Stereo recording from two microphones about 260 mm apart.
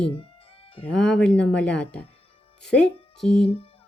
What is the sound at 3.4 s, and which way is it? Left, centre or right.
Music, left.